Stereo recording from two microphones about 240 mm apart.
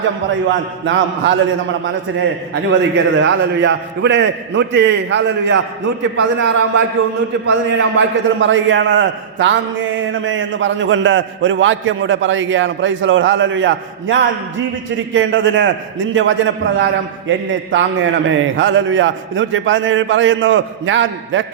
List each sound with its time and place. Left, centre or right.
0.9 s a man's voice: right
2.6 s a man's voice: right
7.8 s a man's voice: right